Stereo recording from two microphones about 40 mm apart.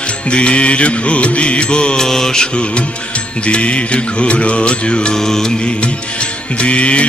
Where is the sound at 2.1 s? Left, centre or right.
Centre.